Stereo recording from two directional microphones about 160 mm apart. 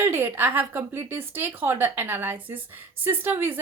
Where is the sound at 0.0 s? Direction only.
15° right (ahead or behind).